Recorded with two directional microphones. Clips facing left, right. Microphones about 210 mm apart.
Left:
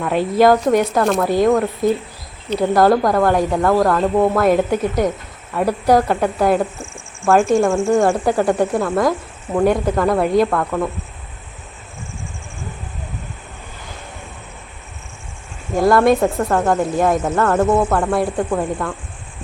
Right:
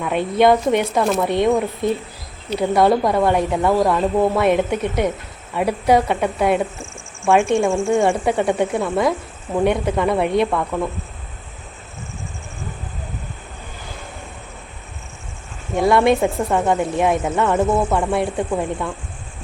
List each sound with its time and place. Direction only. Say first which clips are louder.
0.0 s speech: left 2 dB; centre (ahead or behind)
7.7 s speech: left 2 dB; 25° right (ahead or behind)
8.2 s speech: left 2 dB; centre (ahead or behind)
15.7 s speech: left 2 dB; centre (ahead or behind)